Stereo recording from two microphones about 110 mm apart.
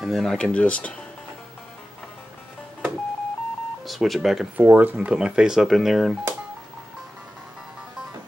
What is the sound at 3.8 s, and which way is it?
Speech, centre (ahead or behind).